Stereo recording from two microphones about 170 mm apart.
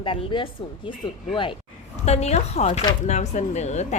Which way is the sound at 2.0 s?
40° left (ahead or behind).